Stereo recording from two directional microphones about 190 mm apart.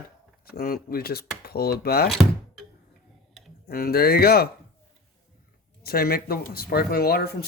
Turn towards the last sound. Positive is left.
turn(degrees=55)  # may be behind; listen again after turning